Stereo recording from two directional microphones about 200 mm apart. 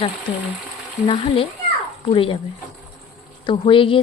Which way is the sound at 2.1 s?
25° left (ahead or behind).